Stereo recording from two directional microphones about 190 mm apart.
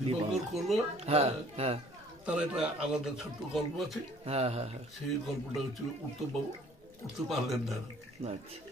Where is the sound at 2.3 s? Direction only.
5° right (ahead or behind).